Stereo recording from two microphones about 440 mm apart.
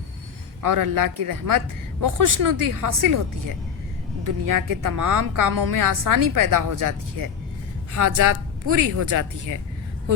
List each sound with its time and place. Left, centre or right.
0.6 s a woman's voice: right
4.2 s a woman's voice: right